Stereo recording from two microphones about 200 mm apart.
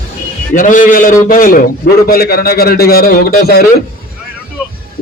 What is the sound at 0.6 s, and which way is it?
A man's voice, 40° left (ahead or behind).